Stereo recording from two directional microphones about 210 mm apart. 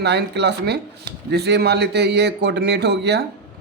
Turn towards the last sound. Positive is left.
turn(degrees=-50)  # may be behind; listen again after turning